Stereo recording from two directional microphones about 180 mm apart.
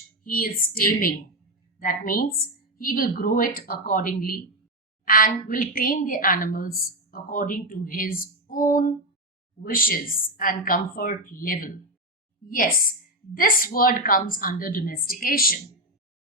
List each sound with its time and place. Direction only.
0.3 s a woman's voice: 55° left (ahead or behind)